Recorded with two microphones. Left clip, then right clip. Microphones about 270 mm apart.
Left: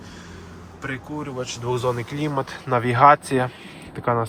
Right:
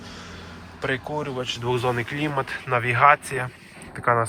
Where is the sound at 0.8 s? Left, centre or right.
Centre.